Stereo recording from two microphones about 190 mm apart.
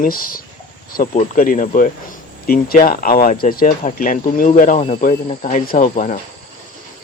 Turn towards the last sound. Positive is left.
turn(degrees=45)  # may be behind; listen again after turning